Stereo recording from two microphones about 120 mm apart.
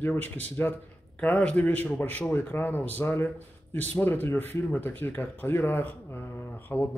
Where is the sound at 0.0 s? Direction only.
15° left (ahead or behind).